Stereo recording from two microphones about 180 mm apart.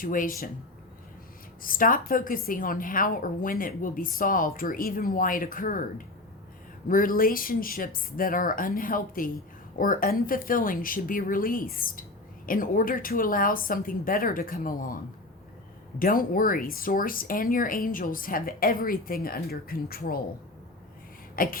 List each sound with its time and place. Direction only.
0.0 s speech: 50° left (ahead or behind)
1.6 s speech: 50° left (ahead or behind)
6.8 s speech: 50° left (ahead or behind)
16.0 s speech: 50° left (ahead or behind)
21.3 s beatboxing: 50° left (ahead or behind)